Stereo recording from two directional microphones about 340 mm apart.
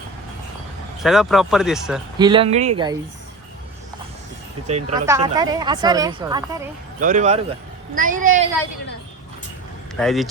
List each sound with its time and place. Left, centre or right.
1.0 s speech: centre
2.1 s speech: centre
4.6 s a woman's voice: centre
7.0 s a woman's voice: right
9.9 s speech: centre